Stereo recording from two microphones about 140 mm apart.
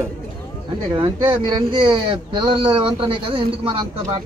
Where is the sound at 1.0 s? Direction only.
35° right (ahead or behind).